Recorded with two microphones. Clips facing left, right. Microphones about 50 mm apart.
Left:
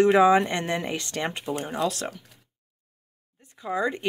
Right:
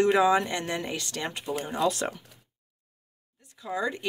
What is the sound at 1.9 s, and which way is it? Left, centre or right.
Speech, centre.